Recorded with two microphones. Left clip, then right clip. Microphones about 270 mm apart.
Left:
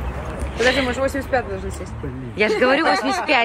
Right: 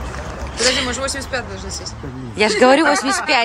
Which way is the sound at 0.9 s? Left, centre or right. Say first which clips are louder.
Left 2 dB; left.